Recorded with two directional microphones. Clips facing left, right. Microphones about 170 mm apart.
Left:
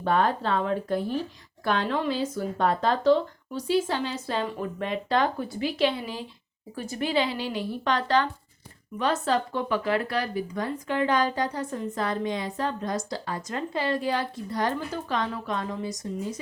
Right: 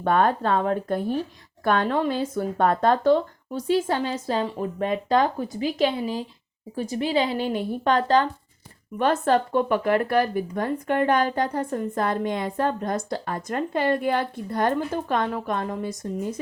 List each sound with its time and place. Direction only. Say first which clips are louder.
0.0 s speech: right 3 dB; 55° right (ahead or behind)
9.0 s speech: right 4 dB; 55° right (ahead or behind)